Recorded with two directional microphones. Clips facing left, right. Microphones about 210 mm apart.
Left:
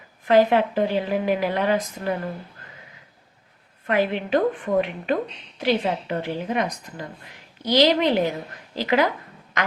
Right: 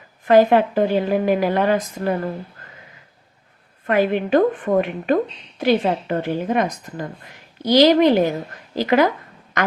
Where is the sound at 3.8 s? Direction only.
50° right (ahead or behind).